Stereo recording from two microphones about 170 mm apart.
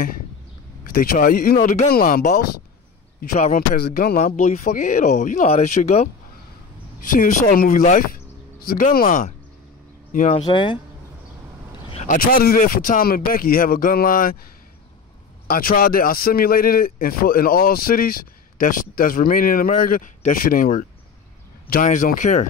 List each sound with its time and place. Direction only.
0.9 s speech: 55° left (ahead or behind)
1.6 s speech: 40° left (ahead or behind)
1.9 s speech: 60° left (ahead or behind)
3.3 s speech: 45° left (ahead or behind)
3.7 s speech: 60° left (ahead or behind)
5.2 s speech: 45° left (ahead or behind)
7.0 s speech: 50° left (ahead or behind)
10.3 s speech: 30° left (ahead or behind)
12.0 s speech: 55° left (ahead or behind)
15.4 s speech: 55° left (ahead or behind)